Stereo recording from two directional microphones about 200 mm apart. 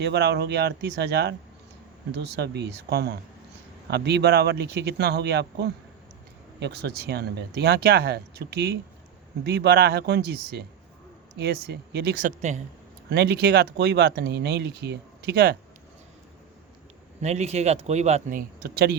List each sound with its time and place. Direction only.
0.0 s speech: 60° right (ahead or behind)
12.4 s speech: 35° right (ahead or behind)
13.1 s speech: 55° right (ahead or behind)
17.2 s speech: 35° right (ahead or behind)